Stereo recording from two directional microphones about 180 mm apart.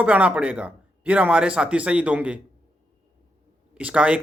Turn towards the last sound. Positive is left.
turn(degrees=-5)  # may be behind; listen again after turning